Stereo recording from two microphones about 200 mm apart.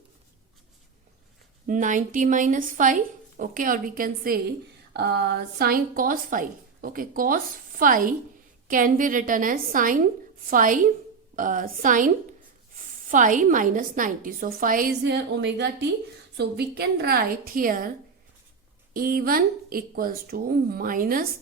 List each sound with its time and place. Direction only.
1.6 s speech: 40° right (ahead or behind)
4.9 s a woman's voice: 55° right (ahead or behind)
18.9 s a woman's voice: 45° right (ahead or behind)